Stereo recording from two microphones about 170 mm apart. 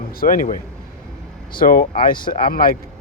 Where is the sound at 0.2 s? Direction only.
55° left (ahead or behind).